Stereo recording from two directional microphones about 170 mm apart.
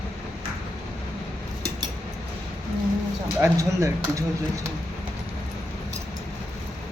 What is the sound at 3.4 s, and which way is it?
Speech, 20° right (ahead or behind).